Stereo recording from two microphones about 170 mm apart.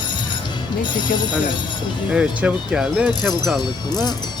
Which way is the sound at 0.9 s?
25° left (ahead or behind).